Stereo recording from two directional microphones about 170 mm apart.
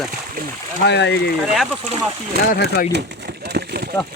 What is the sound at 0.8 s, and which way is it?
Speech, 90° left.